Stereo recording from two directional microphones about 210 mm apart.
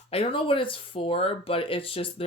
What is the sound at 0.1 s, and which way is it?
Speech, 25° left (ahead or behind).